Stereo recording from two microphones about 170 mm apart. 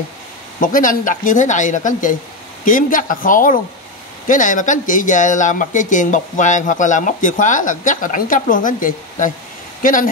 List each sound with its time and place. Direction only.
0.6 s speech: 50° left (ahead or behind)